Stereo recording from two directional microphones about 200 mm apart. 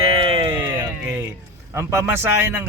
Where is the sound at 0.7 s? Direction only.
10° right (ahead or behind).